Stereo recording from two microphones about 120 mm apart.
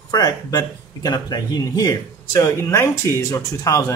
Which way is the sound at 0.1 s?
30° left (ahead or behind).